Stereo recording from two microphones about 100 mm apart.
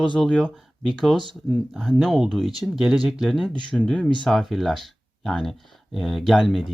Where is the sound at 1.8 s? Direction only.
Centre (ahead or behind).